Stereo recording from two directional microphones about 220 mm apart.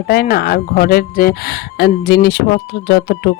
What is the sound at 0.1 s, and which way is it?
Speech, 45° left (ahead or behind).